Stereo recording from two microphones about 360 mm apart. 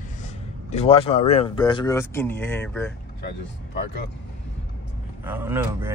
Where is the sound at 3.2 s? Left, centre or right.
Left.